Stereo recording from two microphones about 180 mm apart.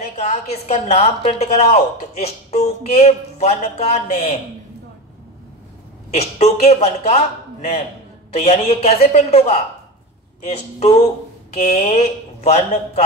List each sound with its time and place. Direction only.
0.0 s a woman's voice: 40° left (ahead or behind)
6.1 s a woman's voice: 40° left (ahead or behind)